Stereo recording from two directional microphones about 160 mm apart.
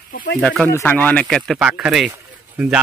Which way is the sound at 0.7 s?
15° left (ahead or behind).